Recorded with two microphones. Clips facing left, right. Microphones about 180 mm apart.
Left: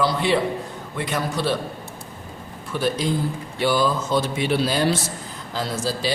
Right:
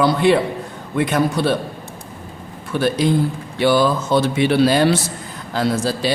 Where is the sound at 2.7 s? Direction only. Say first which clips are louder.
Right 6 dB; 65° right (ahead or behind).